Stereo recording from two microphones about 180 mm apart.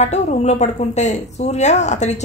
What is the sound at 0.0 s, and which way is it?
A woman's voice, 40° left (ahead or behind).